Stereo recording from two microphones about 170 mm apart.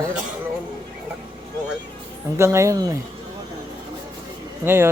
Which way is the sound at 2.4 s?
15° right (ahead or behind).